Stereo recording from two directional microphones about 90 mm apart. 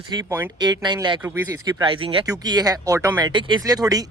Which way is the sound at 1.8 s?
75° right (ahead or behind).